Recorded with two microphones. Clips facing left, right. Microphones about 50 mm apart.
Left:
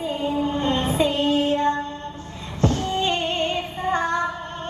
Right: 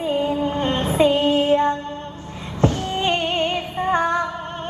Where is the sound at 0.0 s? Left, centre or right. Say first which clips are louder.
Right 3 dB; right.